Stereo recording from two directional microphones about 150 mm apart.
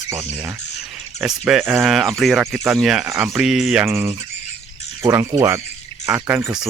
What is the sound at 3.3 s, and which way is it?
Speech, 5° right (ahead or behind).